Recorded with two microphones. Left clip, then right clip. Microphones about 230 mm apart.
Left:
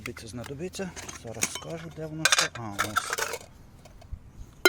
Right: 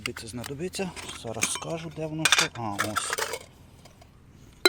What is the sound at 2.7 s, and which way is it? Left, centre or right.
Coin, centre.